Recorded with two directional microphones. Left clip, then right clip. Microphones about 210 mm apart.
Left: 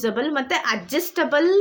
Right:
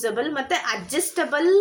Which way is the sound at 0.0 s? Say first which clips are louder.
Left 2 dB; 50° left (ahead or behind).